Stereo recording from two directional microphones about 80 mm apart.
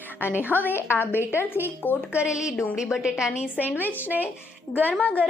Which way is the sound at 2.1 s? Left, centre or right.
Centre.